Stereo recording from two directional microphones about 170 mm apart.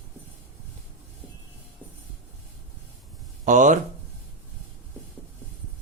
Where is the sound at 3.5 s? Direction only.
45° right (ahead or behind).